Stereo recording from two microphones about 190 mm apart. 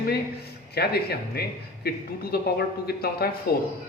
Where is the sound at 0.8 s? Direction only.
55° left (ahead or behind).